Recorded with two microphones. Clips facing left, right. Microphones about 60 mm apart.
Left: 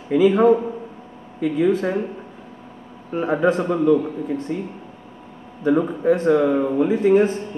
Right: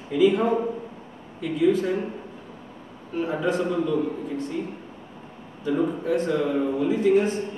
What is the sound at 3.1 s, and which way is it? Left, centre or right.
A man's voice, left.